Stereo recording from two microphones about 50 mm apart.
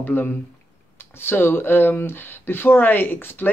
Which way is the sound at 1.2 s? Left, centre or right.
Left.